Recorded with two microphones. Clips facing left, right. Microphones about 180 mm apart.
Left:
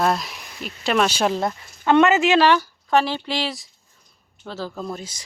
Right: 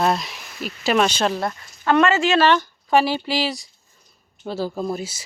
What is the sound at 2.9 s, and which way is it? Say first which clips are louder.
Speech: right 2 dB; 10° right (ahead or behind).